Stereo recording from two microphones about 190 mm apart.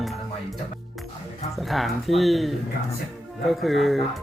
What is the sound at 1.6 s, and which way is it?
Speech, centre (ahead or behind).